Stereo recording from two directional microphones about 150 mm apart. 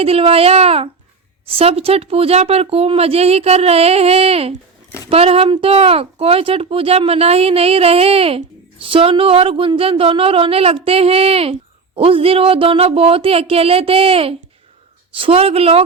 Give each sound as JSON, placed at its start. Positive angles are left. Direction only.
{"t": 0.0, "sound": "speech", "side_deg": -40}